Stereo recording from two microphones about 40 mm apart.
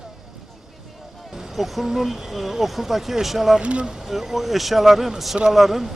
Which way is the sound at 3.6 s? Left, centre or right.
Right.